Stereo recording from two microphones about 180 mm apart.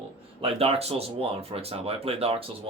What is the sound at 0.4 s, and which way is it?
Speech, 35° right (ahead or behind).